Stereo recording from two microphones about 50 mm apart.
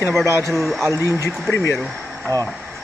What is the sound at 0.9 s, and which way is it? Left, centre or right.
Speech, left.